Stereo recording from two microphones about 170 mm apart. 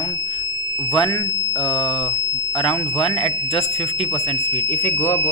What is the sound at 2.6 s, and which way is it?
Speech, 35° left (ahead or behind).